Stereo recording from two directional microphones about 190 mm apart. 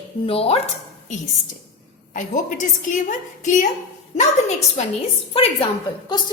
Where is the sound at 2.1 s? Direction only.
40° left (ahead or behind).